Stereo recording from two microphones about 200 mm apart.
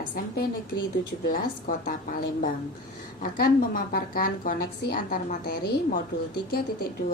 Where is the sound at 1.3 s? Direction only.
45° left (ahead or behind).